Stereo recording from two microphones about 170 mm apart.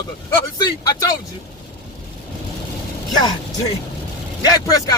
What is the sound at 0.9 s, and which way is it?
Speech, 20° left (ahead or behind).